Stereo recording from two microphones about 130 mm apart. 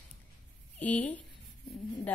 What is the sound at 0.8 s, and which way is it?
Speech, 10° left (ahead or behind).